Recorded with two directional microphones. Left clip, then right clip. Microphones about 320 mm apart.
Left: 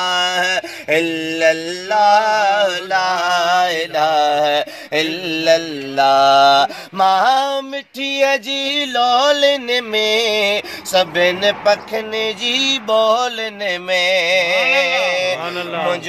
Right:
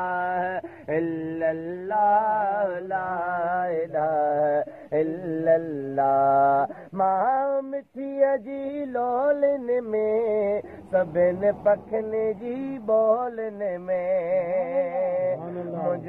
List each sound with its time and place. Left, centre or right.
0.0 s mantra: left
8.6 s mantra: left